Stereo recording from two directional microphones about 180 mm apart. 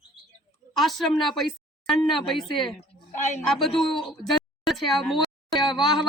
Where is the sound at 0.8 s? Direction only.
Centre (ahead or behind).